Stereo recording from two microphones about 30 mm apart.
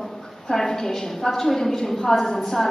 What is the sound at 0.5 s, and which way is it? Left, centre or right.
A woman's voice, centre.